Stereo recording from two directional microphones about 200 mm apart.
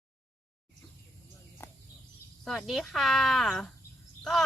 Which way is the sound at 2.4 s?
Centre (ahead or behind).